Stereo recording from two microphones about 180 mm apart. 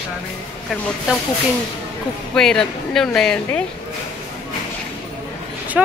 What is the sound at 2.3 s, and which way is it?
Speech, 5° left (ahead or behind).